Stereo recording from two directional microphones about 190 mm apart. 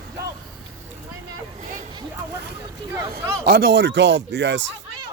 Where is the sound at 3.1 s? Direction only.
55° right (ahead or behind).